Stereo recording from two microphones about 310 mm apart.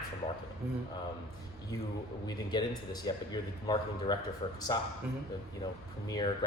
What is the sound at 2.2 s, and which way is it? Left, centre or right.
A man's voice, centre.